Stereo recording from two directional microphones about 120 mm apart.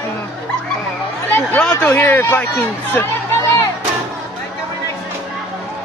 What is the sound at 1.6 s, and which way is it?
Speech, 15° left (ahead or behind).